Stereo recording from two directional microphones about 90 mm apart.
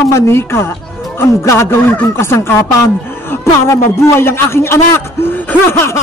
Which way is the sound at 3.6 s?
30° left (ahead or behind).